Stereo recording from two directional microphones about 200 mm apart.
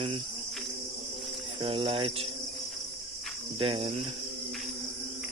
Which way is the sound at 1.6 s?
30° right (ahead or behind).